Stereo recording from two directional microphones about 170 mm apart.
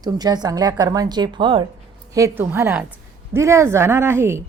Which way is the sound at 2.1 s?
15° right (ahead or behind).